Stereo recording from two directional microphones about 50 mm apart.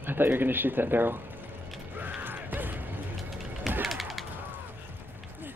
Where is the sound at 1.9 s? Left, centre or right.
Right.